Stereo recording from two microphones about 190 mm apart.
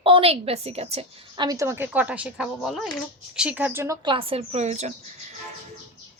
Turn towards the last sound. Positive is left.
turn(degrees=-35)  # may be behind; listen again after turning